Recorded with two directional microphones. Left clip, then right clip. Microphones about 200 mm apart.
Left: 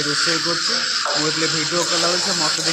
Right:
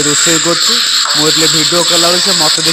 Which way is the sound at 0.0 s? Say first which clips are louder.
Right 8 dB; 45° right (ahead or behind).